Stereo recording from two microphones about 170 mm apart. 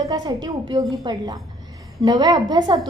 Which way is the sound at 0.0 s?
20° right (ahead or behind).